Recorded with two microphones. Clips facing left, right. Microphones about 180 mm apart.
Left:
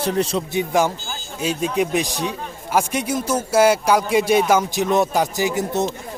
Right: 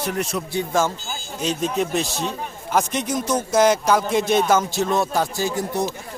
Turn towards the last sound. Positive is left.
turn(degrees=20)  # may be behind; listen again after turning